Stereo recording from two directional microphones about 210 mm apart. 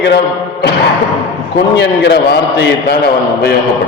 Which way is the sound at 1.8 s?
50° left (ahead or behind).